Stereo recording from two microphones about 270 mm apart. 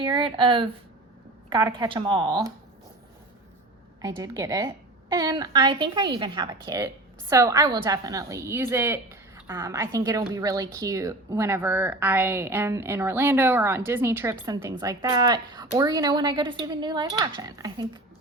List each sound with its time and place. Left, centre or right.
0.0 s a woman's voice: centre
4.0 s a woman's voice: centre